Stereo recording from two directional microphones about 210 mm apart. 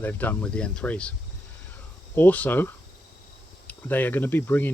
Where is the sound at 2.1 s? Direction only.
10° left (ahead or behind).